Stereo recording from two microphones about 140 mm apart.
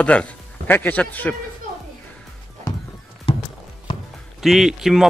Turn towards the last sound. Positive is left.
turn(degrees=-5)  # may be behind; listen again after turning